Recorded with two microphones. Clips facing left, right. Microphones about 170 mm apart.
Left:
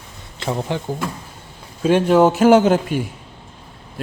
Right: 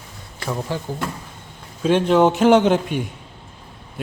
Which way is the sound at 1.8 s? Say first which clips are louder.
Left 2 dB; 10° left (ahead or behind).